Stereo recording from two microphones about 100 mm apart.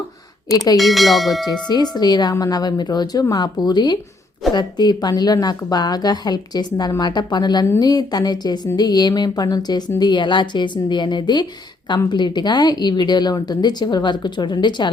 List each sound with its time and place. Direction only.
0.5 s speech: 35° left (ahead or behind)
0.8 s speech: centre (ahead or behind)
1.6 s speech: 45° left (ahead or behind)